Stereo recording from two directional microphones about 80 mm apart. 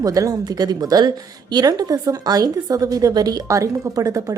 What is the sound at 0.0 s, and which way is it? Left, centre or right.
A woman's voice, right.